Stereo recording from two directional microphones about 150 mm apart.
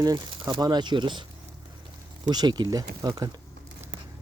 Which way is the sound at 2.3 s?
30° right (ahead or behind).